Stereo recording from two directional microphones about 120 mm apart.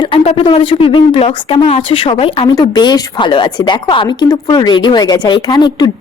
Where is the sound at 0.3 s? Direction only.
45° left (ahead or behind).